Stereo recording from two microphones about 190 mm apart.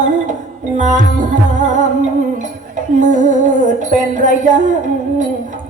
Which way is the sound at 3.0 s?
40° right (ahead or behind).